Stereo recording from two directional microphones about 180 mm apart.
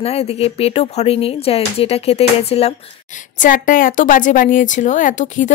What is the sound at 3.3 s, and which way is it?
A woman's voice, 50° left (ahead or behind).